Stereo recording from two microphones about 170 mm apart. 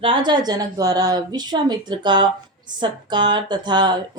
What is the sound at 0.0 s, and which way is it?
A woman's voice, 30° right (ahead or behind).